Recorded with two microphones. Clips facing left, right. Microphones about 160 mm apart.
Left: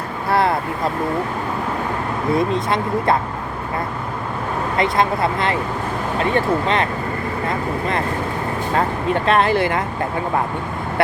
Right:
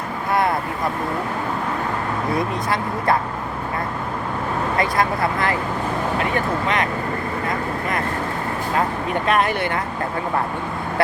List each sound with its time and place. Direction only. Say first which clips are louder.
0.3 s speech: left 2 dB; 30° left (ahead or behind)
2.3 s speech: left 6 dB; 25° left (ahead or behind)
4.8 s speech: left 3 dB; 25° left (ahead or behind)
9.2 s speech: left 3 dB; 25° left (ahead or behind)